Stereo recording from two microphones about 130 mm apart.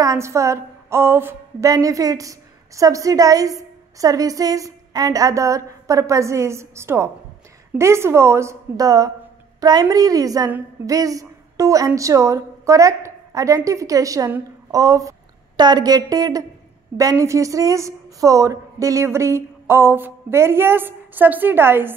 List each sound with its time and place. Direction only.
0.0 s a woman's voice: 25° right (ahead or behind)